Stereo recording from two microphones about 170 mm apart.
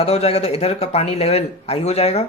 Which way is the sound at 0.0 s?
35° left (ahead or behind).